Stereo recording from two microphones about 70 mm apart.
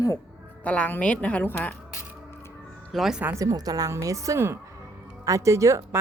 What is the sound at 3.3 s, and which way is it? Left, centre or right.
Speech, right.